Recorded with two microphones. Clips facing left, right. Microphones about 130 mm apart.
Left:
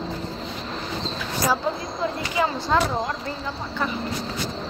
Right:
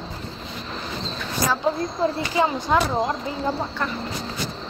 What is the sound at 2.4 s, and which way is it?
Speech, 25° right (ahead or behind).